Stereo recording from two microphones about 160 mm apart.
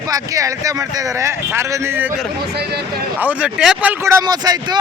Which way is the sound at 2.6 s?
90° right.